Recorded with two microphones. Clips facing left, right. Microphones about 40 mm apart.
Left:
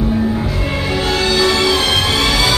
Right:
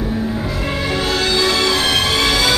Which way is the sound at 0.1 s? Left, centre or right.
Centre.